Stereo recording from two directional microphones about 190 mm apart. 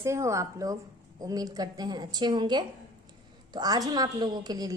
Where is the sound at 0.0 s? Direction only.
15° right (ahead or behind).